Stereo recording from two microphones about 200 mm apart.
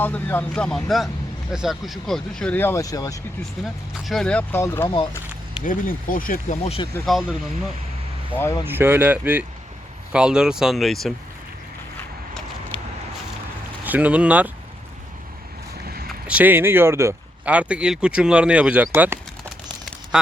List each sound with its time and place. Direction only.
0.0 s speech: 10° left (ahead or behind)
3.6 s speech: centre (ahead or behind)
5.6 s speech: 45° left (ahead or behind)
7.0 s speech: centre (ahead or behind)
8.4 s speech: 15° left (ahead or behind)
8.6 s speech: 10° right (ahead or behind)
13.8 s speech: 10° right (ahead or behind)
16.2 s speech: 5° right (ahead or behind)